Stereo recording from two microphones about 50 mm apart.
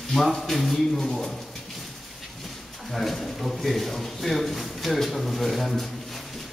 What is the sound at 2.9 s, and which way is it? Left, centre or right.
Speech, centre.